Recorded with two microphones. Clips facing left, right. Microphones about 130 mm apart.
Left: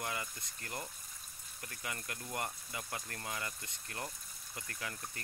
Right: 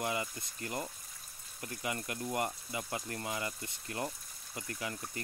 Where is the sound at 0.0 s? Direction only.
10° right (ahead or behind).